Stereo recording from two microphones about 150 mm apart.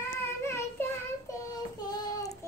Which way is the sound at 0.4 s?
15° left (ahead or behind).